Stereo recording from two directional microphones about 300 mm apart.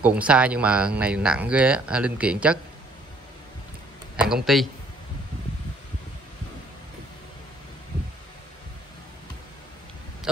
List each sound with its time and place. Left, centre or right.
0.0 s speech: centre
4.5 s speech: centre
10.3 s speech: centre